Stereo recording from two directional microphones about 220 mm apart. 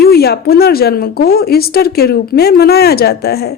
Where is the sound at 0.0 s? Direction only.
45° left (ahead or behind).